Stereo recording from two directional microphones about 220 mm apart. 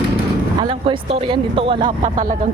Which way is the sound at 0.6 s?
25° right (ahead or behind).